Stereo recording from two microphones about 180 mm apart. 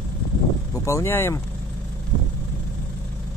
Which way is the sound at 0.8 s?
15° left (ahead or behind).